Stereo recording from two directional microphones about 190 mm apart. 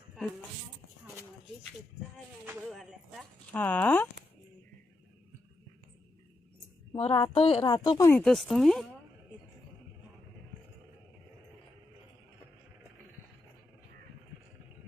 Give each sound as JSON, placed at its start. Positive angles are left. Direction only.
{"t": 2.6, "sound": "a sound", "side_deg": 0}
{"t": 6.9, "sound": "a woman's voice", "side_deg": 30}
{"t": 8.2, "sound": "speech", "side_deg": 0}